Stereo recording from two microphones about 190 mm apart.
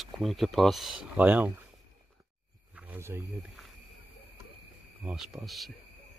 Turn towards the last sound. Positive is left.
turn(degrees=0)  # may be behind; listen again after turning